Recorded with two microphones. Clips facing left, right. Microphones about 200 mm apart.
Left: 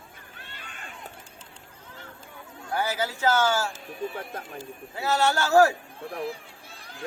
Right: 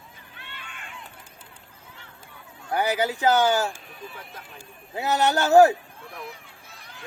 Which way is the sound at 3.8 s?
45° left (ahead or behind).